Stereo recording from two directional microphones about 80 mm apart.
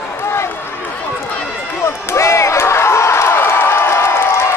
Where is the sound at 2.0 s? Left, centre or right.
Left.